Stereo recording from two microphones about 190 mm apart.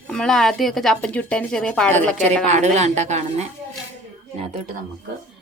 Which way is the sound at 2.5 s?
35° right (ahead or behind).